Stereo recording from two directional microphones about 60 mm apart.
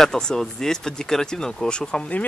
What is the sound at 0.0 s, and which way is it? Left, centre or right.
Speech, centre.